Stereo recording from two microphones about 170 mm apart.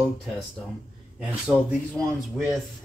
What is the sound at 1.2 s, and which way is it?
Speech, 5° right (ahead or behind).